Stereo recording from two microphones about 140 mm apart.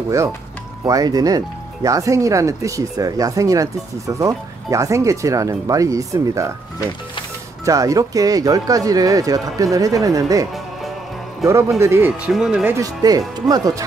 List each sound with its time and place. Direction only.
0.8 s speech: 25° right (ahead or behind)
7.6 s speech: 25° right (ahead or behind)
11.8 s speech: 20° right (ahead or behind)
12.3 s speech: 5° right (ahead or behind)
12.6 s speech: 25° right (ahead or behind)